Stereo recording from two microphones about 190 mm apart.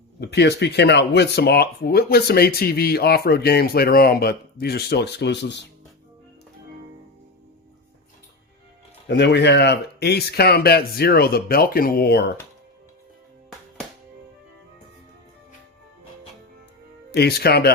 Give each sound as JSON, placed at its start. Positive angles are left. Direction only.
{"t": 0.2, "sound": "speech", "side_deg": 60}
{"t": 9.0, "sound": "speech", "side_deg": 60}
{"t": 17.1, "sound": "speech", "side_deg": 55}